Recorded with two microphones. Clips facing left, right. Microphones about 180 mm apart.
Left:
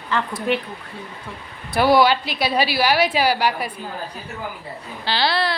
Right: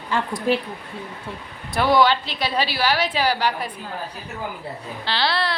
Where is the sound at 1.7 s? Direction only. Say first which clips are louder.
Left 2 dB; 5° left (ahead or behind).